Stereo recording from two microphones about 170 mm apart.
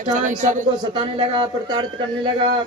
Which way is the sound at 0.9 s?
30° right (ahead or behind).